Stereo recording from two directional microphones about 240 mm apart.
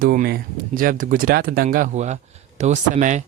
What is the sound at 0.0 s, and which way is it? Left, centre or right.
Speech, right.